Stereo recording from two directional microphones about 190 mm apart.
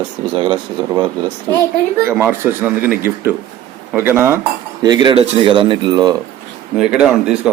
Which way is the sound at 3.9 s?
10° right (ahead or behind).